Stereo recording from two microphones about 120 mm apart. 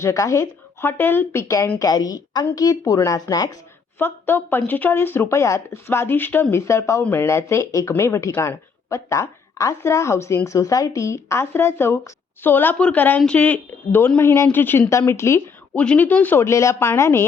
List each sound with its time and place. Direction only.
0.0 s a woman's voice: 25° left (ahead or behind)
3.9 s speech: 15° left (ahead or behind)
15.8 s speech: 10° left (ahead or behind)